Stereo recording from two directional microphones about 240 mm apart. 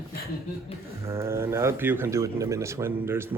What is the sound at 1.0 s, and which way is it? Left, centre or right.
Speech, centre.